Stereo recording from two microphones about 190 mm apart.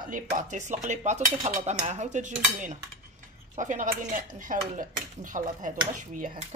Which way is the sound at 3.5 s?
40° right (ahead or behind).